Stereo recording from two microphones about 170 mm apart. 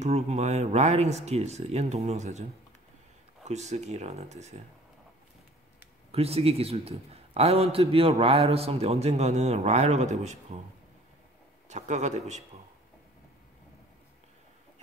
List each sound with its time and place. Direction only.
0.0 s a man's voice: 40° right (ahead or behind)
3.4 s a man's voice: 40° right (ahead or behind)
6.1 s a man's voice: 35° right (ahead or behind)
11.7 s a man's voice: 45° right (ahead or behind)